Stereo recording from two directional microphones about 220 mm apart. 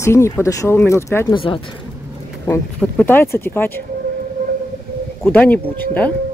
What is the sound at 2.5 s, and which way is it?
Speech, 10° left (ahead or behind).